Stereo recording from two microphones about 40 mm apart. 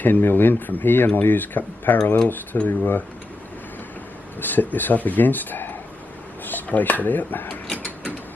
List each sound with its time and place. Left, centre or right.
0.0 s speech: left
4.4 s speech: left